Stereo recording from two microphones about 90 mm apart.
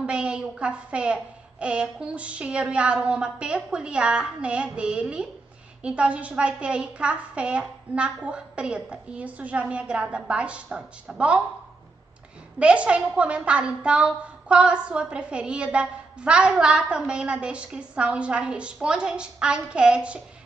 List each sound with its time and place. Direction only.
0.0 s a woman's voice: 10° right (ahead or behind)
12.5 s a woman's voice: 10° right (ahead or behind)